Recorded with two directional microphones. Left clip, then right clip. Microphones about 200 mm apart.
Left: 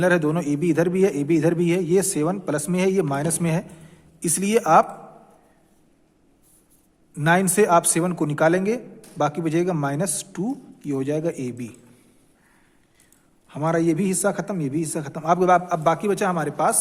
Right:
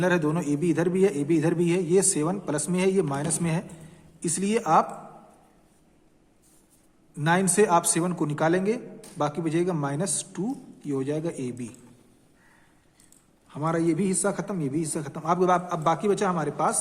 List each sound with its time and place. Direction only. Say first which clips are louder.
0.0 s a man's voice: left 5 dB; 25° left (ahead or behind)
7.1 s a man's voice: left 4 dB; 30° left (ahead or behind)
13.5 s a man's voice: left 4 dB; 35° left (ahead or behind)